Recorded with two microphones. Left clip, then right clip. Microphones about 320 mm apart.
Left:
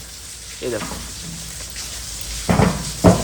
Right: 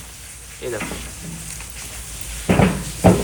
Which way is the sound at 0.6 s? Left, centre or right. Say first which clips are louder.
Left 2 dB; centre.